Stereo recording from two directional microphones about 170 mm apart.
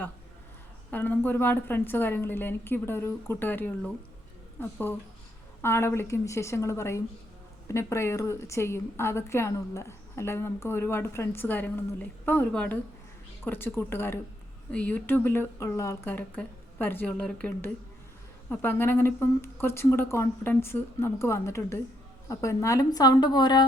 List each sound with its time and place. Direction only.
0.9 s a woman's voice: 10° left (ahead or behind); by 23.6 s 25° left (ahead or behind)